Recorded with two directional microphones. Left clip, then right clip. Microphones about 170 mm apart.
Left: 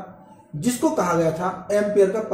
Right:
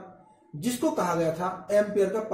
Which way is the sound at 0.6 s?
15° right (ahead or behind).